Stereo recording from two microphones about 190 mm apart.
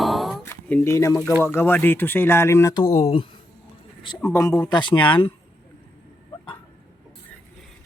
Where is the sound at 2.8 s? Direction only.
35° left (ahead or behind).